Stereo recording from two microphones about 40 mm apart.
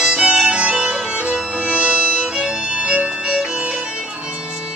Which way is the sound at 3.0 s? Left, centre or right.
Centre.